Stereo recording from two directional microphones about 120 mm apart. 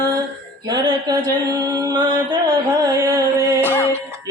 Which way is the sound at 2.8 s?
30° right (ahead or behind).